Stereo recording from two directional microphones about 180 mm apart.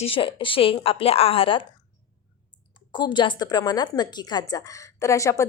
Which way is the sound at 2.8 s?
25° left (ahead or behind).